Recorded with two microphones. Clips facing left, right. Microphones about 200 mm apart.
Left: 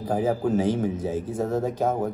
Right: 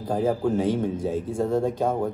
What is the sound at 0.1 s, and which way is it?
A man's voice, 5° left (ahead or behind).